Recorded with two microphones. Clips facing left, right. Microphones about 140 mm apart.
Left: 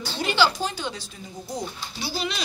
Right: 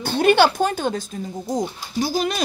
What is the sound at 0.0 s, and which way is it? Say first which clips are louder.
A woman's voice: right 8 dB; 55° right (ahead or behind).